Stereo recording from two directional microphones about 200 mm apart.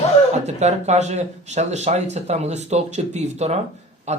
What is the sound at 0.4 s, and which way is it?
Speech, 35° right (ahead or behind).